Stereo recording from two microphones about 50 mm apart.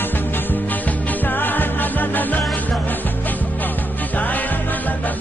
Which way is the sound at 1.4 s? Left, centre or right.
Left.